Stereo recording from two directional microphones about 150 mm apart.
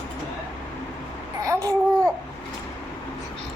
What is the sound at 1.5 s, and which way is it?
Babbling, 20° right (ahead or behind).